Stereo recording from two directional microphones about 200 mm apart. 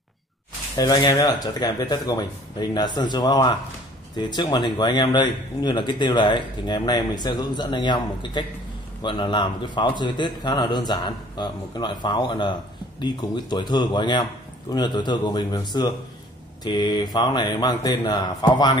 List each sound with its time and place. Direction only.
0.7 s speech: 20° left (ahead or behind)